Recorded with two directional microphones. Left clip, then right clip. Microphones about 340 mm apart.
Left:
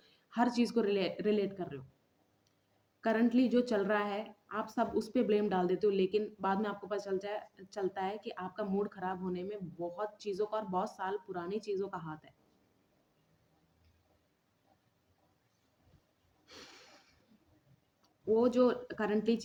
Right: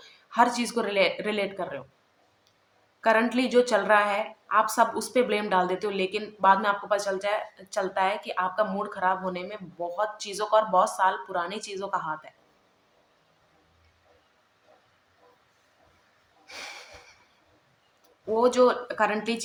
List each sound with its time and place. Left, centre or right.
0.0 s a woman's voice: left
3.0 s a woman's voice: left
16.5 s a sound: left
18.3 s a woman's voice: left